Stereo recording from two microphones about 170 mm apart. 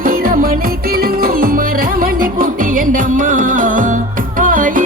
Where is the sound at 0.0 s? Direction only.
55° right (ahead or behind).